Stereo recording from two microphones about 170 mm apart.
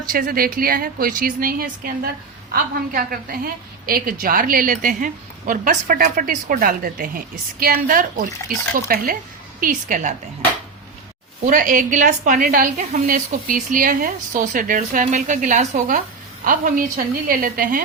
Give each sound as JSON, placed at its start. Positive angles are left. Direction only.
{"t": 0.0, "sound": "a woman's voice", "side_deg": -60}
{"t": 11.4, "sound": "a woman's voice", "side_deg": -50}